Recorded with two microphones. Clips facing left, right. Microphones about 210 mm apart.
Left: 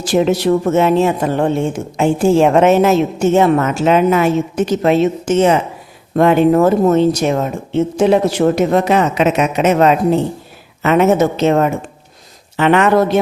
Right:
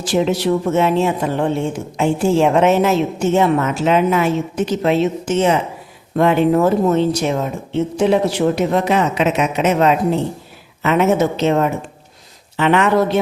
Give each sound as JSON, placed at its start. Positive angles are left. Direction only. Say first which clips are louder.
{"t": 0.0, "sound": "a woman's voice", "louder": "left 3 dB", "side_deg": 45}